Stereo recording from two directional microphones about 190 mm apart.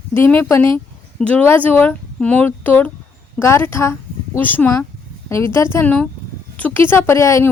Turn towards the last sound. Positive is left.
turn(degrees=15)  # may be behind; listen again after turning